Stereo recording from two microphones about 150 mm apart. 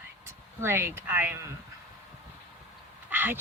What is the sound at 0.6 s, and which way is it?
Speech, 15° right (ahead or behind).